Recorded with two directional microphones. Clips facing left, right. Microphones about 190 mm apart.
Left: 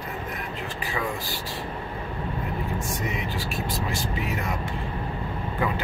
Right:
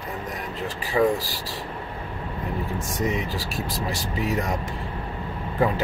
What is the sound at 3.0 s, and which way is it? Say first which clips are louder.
Speech: right 4 dB; 40° right (ahead or behind).